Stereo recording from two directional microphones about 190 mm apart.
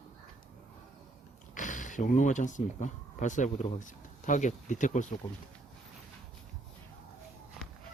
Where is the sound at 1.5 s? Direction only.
40° left (ahead or behind).